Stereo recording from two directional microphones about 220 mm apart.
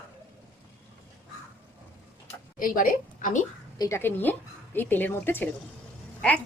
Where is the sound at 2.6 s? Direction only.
40° left (ahead or behind).